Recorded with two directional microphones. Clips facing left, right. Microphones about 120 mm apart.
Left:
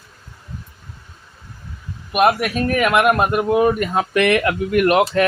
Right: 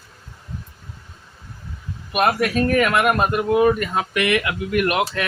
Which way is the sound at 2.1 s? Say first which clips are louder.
Left 2 dB; 5° left (ahead or behind).